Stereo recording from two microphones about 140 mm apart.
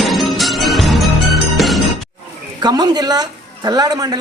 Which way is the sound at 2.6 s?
30° right (ahead or behind).